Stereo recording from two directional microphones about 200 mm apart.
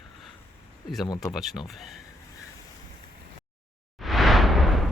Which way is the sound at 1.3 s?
Centre (ahead or behind).